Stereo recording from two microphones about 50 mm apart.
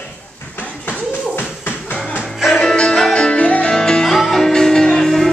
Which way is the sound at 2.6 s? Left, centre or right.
Centre.